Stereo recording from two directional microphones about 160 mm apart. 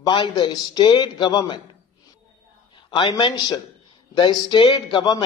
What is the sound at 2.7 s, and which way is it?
A man's voice, 30° left (ahead or behind).